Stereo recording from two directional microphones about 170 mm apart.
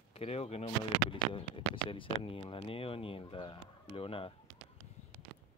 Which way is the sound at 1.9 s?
30° left (ahead or behind).